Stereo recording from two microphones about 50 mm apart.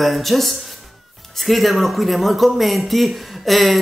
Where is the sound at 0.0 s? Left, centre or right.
Centre.